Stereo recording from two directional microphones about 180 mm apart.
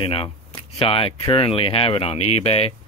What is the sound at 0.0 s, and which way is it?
Speech, 30° left (ahead or behind).